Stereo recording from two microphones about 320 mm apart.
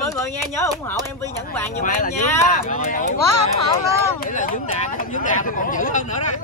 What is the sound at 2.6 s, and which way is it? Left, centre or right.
Speech, left.